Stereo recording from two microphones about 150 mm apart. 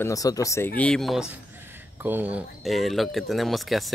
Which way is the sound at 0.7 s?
5° left (ahead or behind).